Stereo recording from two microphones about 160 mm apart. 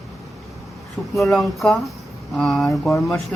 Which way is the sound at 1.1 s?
Centre (ahead or behind).